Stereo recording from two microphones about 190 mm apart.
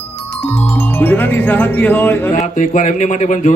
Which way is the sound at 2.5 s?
40° left (ahead or behind).